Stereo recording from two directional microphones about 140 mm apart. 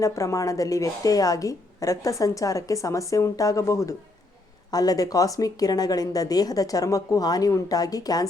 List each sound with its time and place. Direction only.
0.0 s a woman's voice: 20° left (ahead or behind)